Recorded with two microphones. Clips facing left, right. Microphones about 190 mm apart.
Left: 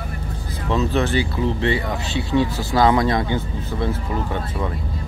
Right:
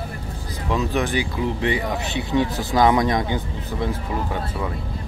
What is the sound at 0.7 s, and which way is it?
Speech, 15° right (ahead or behind).